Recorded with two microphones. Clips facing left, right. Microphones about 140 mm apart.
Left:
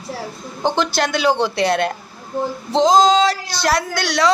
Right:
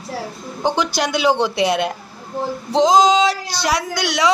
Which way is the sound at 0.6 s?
10° right (ahead or behind).